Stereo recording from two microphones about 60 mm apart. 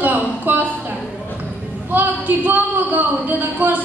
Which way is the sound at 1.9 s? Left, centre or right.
Right.